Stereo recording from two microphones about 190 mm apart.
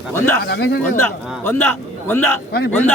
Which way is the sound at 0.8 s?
10° left (ahead or behind).